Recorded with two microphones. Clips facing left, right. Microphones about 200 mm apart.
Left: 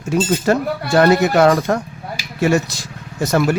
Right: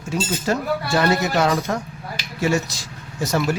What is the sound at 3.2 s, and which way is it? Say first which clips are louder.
Speech: left 5 dB; 55° left (ahead or behind).